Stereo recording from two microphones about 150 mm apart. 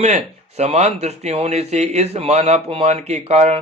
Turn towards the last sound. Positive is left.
turn(degrees=-45)  # may be behind; listen again after turning